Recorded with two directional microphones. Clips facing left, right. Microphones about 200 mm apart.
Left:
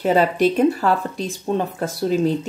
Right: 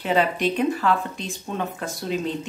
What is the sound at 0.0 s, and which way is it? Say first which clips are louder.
Speech: left 5 dB; 40° left (ahead or behind).